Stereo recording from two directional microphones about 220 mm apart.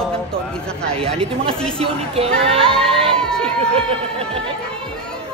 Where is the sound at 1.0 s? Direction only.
25° right (ahead or behind).